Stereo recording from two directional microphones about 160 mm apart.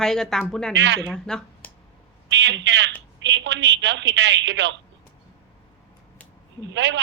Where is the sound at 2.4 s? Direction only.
90° right.